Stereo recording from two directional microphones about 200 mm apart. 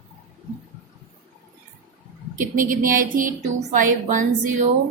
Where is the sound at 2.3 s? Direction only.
40° right (ahead or behind).